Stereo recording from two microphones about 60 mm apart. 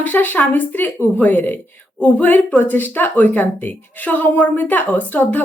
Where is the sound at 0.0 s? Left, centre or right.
Left.